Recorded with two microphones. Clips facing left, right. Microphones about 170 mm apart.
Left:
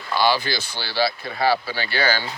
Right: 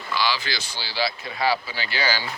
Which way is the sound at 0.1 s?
55° left (ahead or behind).